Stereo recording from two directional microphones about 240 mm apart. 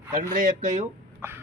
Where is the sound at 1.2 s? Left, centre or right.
Centre.